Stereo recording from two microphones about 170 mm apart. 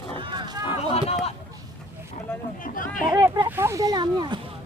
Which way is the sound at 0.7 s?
35° left (ahead or behind).